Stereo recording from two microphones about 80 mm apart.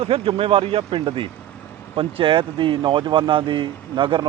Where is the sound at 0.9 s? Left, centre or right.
Right.